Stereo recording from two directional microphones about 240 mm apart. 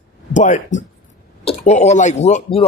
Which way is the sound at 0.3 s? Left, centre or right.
Left.